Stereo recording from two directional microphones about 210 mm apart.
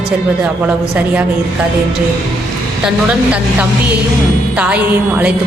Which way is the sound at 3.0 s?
5° right (ahead or behind).